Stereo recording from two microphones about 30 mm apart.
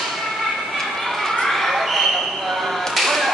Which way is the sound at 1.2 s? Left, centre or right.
Centre.